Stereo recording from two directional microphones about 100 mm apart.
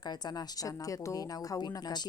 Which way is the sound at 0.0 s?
45° left (ahead or behind).